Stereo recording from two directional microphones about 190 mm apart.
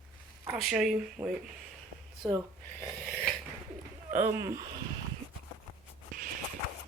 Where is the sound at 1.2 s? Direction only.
20° right (ahead or behind).